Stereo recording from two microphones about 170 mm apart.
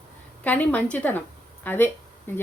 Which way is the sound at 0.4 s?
10° left (ahead or behind).